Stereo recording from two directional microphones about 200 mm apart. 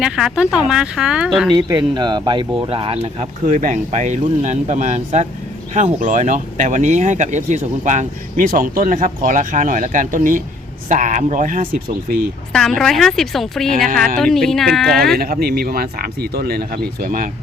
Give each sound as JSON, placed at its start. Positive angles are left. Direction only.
{"t": 0.0, "sound": "speech", "side_deg": -5}
{"t": 1.5, "sound": "speech", "side_deg": -20}
{"t": 12.5, "sound": "speech", "side_deg": 0}
{"t": 15.2, "sound": "speech", "side_deg": -50}